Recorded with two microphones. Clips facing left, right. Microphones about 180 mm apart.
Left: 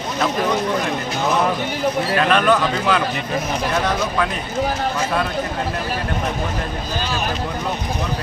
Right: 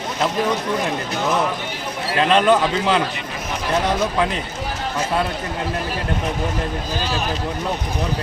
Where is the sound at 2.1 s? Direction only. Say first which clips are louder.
Right 3 dB; 25° right (ahead or behind).